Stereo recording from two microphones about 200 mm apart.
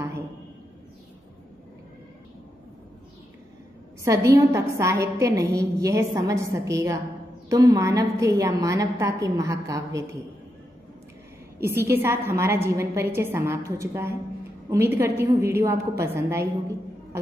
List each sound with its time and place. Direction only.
4.0 s a woman's voice: 15° right (ahead or behind)
11.6 s a woman's voice: 15° right (ahead or behind)